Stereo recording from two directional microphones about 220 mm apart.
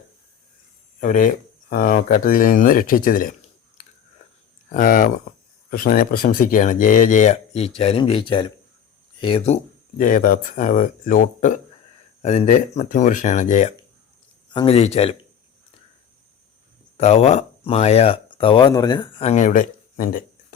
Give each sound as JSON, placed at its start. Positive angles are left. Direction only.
{"t": 0.9, "sound": "speech", "side_deg": 35}
{"t": 4.7, "sound": "speech", "side_deg": 40}
{"t": 14.5, "sound": "speech", "side_deg": 25}
{"t": 17.0, "sound": "speech", "side_deg": 30}